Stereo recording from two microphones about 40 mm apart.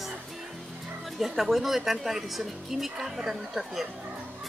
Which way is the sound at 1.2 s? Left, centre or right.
Centre.